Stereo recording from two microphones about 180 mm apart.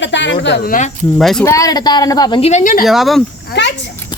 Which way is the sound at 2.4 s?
45° left (ahead or behind).